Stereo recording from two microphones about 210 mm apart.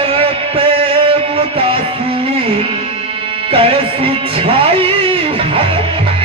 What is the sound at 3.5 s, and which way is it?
Music, 25° right (ahead or behind).